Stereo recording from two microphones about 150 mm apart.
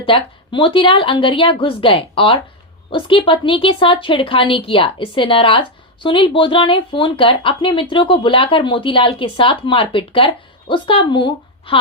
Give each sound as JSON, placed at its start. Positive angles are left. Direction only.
{"t": 0.0, "sound": "a woman's voice", "side_deg": 35}